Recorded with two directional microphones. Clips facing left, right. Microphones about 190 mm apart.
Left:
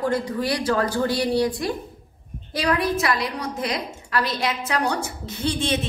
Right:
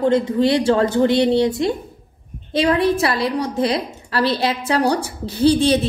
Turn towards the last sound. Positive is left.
turn(degrees=-35)  # may be behind; listen again after turning